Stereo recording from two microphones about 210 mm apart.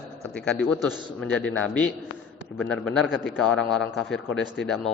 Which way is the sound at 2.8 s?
Centre (ahead or behind).